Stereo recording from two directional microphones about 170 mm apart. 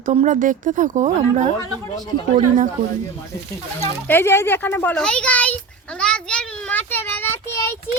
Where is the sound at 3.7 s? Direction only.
15° left (ahead or behind).